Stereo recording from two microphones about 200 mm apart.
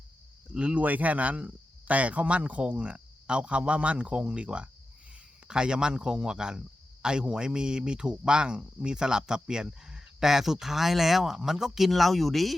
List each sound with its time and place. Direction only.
0.5 s speech: 5° right (ahead or behind)